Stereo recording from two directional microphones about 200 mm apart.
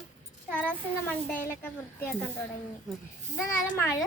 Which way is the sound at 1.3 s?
10° left (ahead or behind).